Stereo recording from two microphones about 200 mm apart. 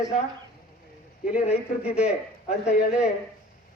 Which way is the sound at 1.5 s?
30° left (ahead or behind).